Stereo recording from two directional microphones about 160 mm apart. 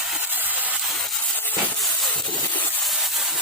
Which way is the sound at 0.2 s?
10° right (ahead or behind).